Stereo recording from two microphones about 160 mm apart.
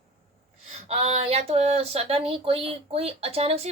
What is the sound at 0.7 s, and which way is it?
Speech, 40° right (ahead or behind).